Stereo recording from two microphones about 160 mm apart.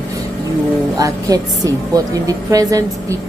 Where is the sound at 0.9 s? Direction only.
20° right (ahead or behind).